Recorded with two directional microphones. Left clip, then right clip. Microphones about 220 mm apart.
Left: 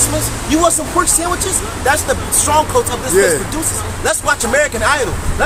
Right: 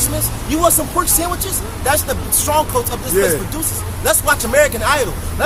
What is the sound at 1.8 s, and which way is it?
Speech, 20° right (ahead or behind).